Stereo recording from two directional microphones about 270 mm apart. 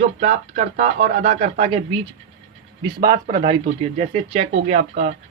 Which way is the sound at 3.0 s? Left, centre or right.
Centre.